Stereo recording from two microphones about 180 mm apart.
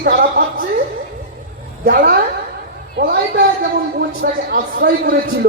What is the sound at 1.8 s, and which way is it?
A man's voice, 60° right (ahead or behind).